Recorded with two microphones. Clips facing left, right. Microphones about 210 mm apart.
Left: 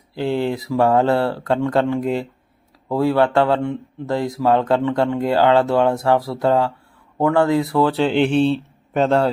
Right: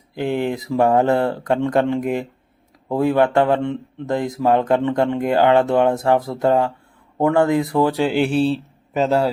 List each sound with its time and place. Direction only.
0.1 s speech: 15° right (ahead or behind)